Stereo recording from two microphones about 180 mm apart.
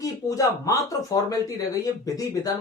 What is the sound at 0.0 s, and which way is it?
Speech, 20° left (ahead or behind).